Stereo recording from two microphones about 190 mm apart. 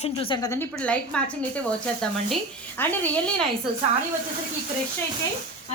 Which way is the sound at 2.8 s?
10° left (ahead or behind).